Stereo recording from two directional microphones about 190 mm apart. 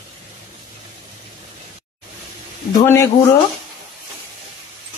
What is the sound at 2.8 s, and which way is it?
Speech, 15° left (ahead or behind).